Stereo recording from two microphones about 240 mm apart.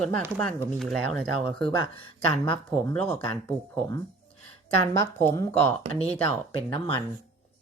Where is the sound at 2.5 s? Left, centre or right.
Centre.